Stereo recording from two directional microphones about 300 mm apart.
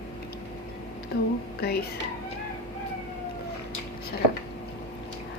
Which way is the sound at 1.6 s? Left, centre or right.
Left.